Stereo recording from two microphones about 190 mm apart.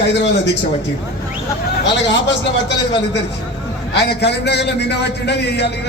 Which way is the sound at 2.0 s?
70° left (ahead or behind).